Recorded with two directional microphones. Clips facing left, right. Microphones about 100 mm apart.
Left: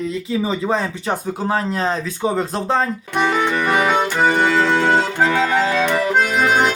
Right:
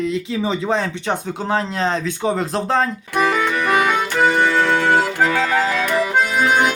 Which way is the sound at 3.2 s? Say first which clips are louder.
Even; 25° left (ahead or behind).